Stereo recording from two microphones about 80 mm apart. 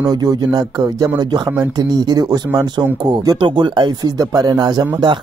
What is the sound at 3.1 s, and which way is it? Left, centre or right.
Speech, right.